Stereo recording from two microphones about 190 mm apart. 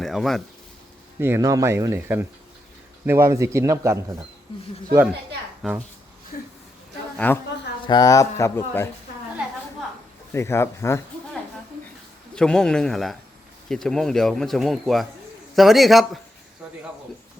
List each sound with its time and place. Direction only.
0.0 s speech: centre (ahead or behind)
1.2 s speech: 15° right (ahead or behind)
6.3 s a woman's voice: 50° left (ahead or behind)
7.2 s speech: 10° left (ahead or behind)
7.9 s speech: 20° left (ahead or behind)
10.3 s speech: 15° left (ahead or behind)
12.3 s speech: 5° left (ahead or behind)